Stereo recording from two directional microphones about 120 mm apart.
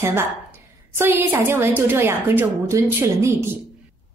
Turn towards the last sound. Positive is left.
turn(degrees=-25)  # may be behind; listen again after turning